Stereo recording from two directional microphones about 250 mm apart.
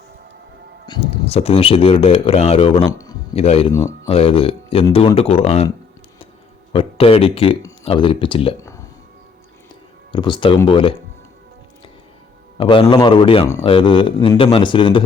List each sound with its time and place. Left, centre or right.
0.9 s speech: left
3.3 s speech: left
3.7 s speech: centre
4.1 s speech: left
6.7 s speech: left
10.1 s speech: centre
12.5 s speech: centre